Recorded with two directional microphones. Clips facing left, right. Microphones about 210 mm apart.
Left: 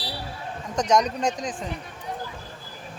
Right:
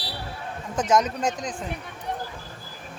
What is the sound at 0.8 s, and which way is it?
Speech, 5° right (ahead or behind).